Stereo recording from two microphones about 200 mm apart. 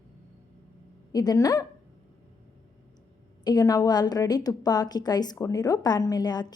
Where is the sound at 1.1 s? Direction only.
20° left (ahead or behind).